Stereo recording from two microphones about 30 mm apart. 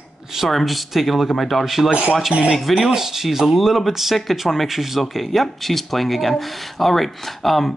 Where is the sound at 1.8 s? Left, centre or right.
Right.